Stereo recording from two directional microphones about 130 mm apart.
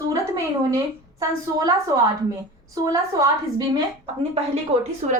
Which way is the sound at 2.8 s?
25° right (ahead or behind).